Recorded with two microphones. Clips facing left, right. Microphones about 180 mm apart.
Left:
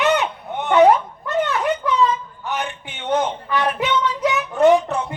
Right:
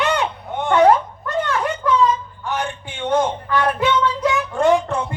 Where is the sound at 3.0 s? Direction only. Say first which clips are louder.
Right 2 dB; 15° left (ahead or behind).